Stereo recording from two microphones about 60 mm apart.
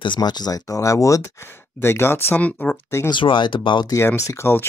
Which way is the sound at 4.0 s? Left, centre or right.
Left.